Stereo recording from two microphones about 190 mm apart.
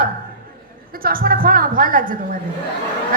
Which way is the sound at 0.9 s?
50° right (ahead or behind).